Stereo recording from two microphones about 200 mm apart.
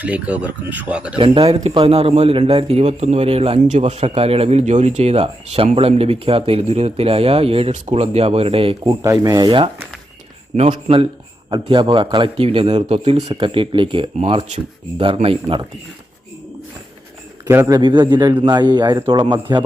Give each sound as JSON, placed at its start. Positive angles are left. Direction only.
{"t": 0.0, "sound": "speech", "side_deg": -5}
{"t": 1.2, "sound": "a man's voice", "side_deg": -30}
{"t": 17.4, "sound": "a man's voice", "side_deg": -15}